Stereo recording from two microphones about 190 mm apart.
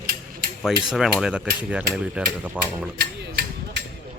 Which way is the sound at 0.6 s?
Centre (ahead or behind).